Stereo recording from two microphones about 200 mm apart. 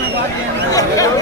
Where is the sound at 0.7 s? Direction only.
15° left (ahead or behind).